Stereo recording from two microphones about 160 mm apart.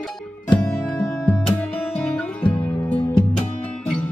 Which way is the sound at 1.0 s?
10° left (ahead or behind).